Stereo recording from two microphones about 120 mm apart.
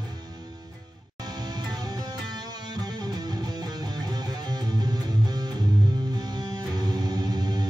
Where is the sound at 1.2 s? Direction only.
35° right (ahead or behind).